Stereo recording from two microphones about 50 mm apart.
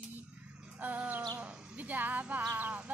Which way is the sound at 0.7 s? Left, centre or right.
Right.